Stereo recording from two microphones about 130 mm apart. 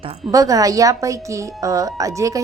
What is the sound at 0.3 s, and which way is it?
A woman's voice, 25° right (ahead or behind).